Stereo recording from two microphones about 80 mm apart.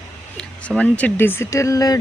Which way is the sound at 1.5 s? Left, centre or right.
Left.